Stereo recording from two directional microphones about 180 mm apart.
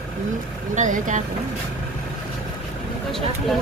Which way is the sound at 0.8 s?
45° right (ahead or behind).